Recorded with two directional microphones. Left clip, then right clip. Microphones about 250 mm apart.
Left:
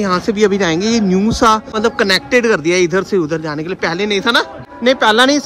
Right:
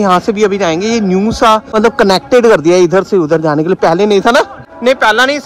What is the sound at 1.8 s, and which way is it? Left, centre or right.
Speech, right.